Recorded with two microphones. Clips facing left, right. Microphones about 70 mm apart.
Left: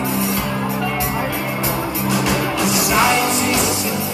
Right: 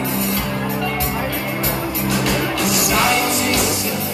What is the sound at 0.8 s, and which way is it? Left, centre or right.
Music, centre.